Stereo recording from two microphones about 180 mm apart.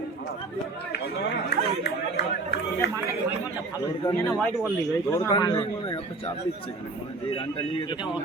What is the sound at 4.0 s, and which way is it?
A man's voice, 15° left (ahead or behind).